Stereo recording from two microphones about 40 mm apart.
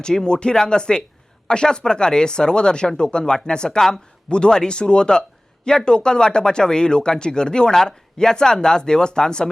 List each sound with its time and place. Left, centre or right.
0.0 s speech: centre